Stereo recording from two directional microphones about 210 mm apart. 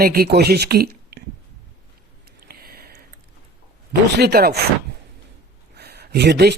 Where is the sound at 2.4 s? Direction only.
45° right (ahead or behind).